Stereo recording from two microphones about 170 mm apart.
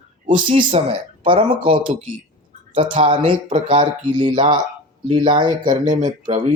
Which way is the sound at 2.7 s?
30° right (ahead or behind).